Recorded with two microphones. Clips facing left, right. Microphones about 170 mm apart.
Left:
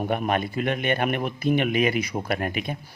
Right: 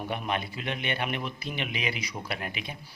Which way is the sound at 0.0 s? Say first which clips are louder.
Left 7 dB; 50° left (ahead or behind).